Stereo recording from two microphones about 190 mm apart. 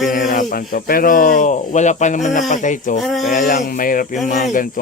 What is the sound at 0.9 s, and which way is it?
Speech, 50° left (ahead or behind).